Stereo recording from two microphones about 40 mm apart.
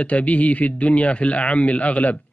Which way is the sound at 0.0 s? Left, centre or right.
Left.